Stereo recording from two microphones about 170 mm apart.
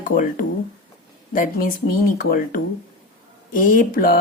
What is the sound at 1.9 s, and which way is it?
Speech, 60° left (ahead or behind).